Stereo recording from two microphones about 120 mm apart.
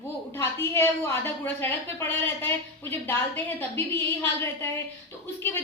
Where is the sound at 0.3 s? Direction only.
20° left (ahead or behind).